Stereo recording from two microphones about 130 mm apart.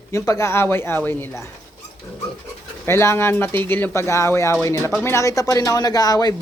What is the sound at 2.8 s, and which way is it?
Speech, 20° left (ahead or behind).